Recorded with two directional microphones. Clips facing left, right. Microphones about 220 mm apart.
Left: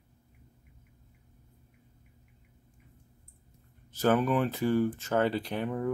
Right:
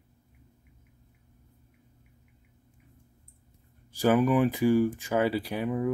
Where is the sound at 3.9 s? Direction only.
10° right (ahead or behind).